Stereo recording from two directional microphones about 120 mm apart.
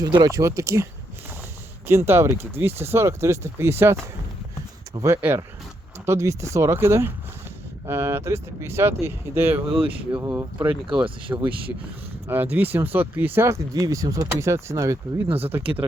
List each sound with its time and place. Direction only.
0.2 s speech: 25° right (ahead or behind)
1.9 s speech: 20° right (ahead or behind)
4.9 s speech: 20° right (ahead or behind)
10.6 s speech: 40° right (ahead or behind)
11.3 s speech: 20° right (ahead or behind)